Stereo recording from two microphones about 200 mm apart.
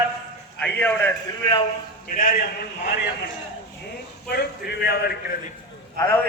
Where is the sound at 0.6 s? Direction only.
10° left (ahead or behind).